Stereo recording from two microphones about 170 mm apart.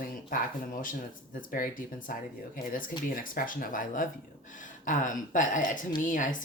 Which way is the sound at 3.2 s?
55° left (ahead or behind).